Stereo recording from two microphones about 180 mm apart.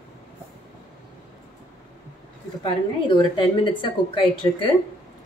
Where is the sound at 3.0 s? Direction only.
25° left (ahead or behind).